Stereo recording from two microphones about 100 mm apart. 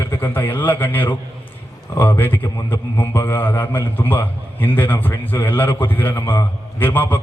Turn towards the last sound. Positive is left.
turn(degrees=20)  # may be behind; listen again after turning